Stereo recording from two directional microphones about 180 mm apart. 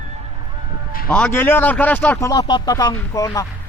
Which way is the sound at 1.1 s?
5° left (ahead or behind).